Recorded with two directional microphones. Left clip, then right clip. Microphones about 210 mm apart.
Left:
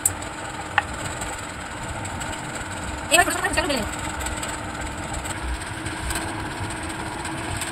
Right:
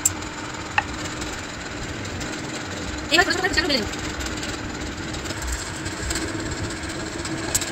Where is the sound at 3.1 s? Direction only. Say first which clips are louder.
Even; 50° left (ahead or behind).